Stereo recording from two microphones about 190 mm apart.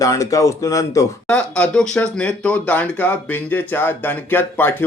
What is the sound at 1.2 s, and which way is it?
A man's voice, 5° left (ahead or behind).